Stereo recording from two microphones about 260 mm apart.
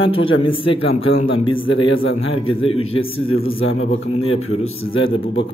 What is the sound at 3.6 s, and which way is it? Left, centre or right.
Speech, left.